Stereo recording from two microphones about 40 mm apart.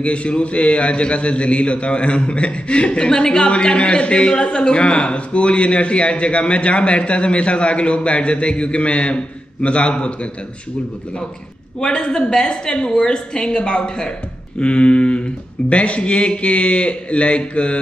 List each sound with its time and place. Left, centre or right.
0.0 s a man's voice: left
11.8 s a man's voice: left